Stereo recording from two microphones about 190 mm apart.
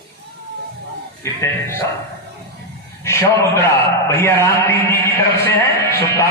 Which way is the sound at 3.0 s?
15° left (ahead or behind).